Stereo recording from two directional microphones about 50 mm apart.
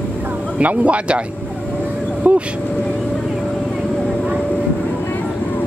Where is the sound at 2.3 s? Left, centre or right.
Right.